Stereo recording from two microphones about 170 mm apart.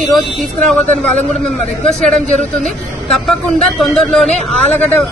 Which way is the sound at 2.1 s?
45° right (ahead or behind).